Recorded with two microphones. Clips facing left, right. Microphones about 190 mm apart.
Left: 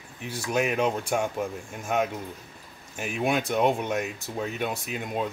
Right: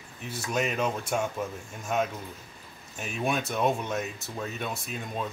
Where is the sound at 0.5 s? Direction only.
10° left (ahead or behind).